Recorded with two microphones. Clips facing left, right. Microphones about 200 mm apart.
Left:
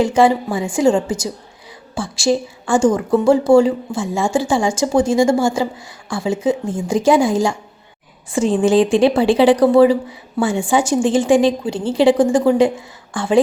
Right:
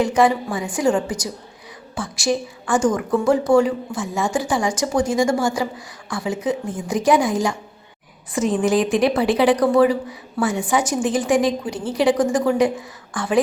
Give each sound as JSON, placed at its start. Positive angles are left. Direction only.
{"t": 0.0, "sound": "a woman's voice", "side_deg": 30}